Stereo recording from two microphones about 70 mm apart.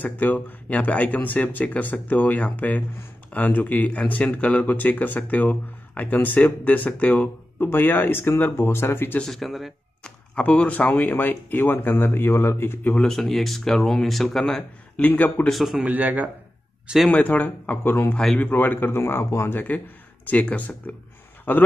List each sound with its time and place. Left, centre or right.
0.0 s speech: left
9.2 s speech: centre
10.0 s speech: centre; by 12.9 s left
13.1 s speech: centre
15.0 s speech: left
15.4 s speech: centre
15.8 s a man's voice: right
17.1 s speech: left
20.2 s speech: centre